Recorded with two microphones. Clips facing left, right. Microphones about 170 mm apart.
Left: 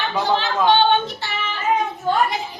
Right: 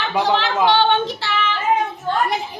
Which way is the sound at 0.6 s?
90° right.